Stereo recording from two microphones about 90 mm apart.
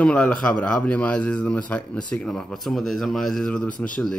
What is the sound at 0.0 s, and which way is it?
Speech, 10° left (ahead or behind).